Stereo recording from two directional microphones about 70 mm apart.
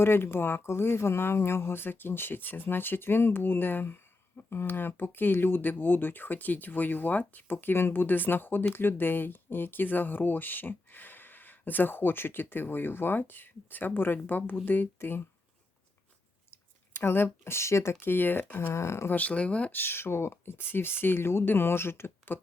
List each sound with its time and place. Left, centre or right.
0.0 s speech: left
17.0 s speech: left
18.0 s speech: left
18.7 s speech: left
19.1 s speech: centre
19.8 s speech: left